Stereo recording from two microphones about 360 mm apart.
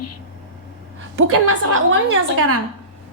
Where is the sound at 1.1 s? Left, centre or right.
Right.